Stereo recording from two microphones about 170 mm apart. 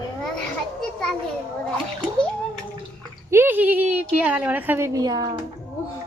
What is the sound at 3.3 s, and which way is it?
A woman's voice, 15° right (ahead or behind).